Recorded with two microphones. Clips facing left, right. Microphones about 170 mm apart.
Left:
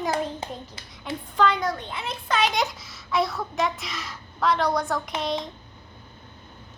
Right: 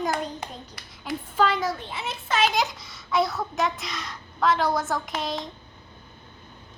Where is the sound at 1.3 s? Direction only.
5° right (ahead or behind).